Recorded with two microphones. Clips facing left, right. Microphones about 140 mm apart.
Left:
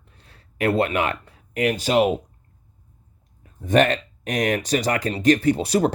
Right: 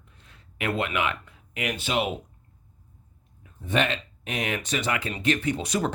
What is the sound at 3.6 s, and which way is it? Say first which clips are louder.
Speech: left 8 dB; 45° left (ahead or behind).